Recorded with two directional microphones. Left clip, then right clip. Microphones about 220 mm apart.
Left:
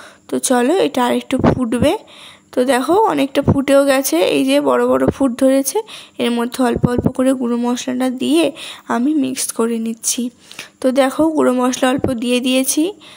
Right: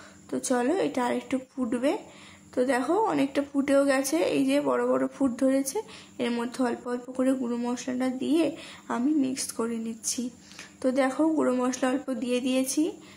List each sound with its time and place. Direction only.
0.3 s a woman's voice: 40° left (ahead or behind)